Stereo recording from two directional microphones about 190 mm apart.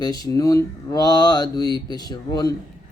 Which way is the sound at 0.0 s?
20° left (ahead or behind).